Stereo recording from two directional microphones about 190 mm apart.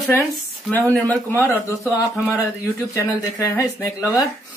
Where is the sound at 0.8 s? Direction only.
15° right (ahead or behind).